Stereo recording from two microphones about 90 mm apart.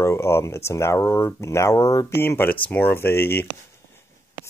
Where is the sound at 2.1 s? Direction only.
25° left (ahead or behind).